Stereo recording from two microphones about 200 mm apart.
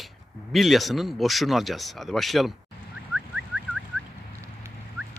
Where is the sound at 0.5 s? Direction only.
Centre (ahead or behind).